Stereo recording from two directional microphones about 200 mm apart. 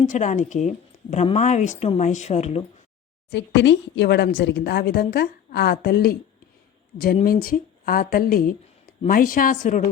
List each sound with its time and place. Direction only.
0.1 s speech: 40° left (ahead or behind)
3.2 s a woman's voice: 60° left (ahead or behind)
7.3 s speech: 45° left (ahead or behind)